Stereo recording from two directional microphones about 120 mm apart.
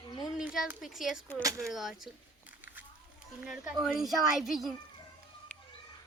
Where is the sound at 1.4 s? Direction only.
30° right (ahead or behind).